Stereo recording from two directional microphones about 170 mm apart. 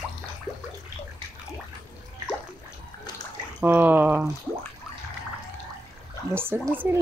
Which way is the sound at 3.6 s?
10° right (ahead or behind).